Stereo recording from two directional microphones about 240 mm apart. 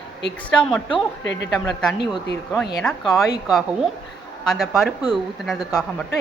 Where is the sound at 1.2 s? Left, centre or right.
Left.